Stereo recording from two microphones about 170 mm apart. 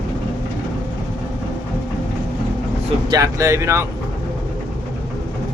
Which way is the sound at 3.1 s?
20° right (ahead or behind).